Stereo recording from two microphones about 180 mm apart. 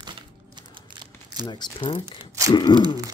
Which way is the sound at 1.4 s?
25° left (ahead or behind).